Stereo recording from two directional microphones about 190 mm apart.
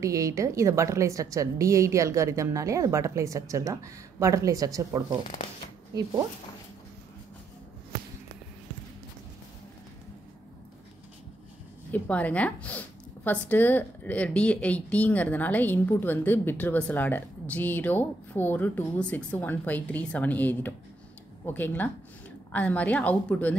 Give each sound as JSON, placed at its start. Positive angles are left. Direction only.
{"t": 0.0, "sound": "a woman's voice", "side_deg": -15}
{"t": 11.9, "sound": "a woman's voice", "side_deg": 10}